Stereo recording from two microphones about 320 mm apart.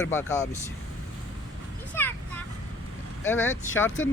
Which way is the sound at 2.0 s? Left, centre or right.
Centre.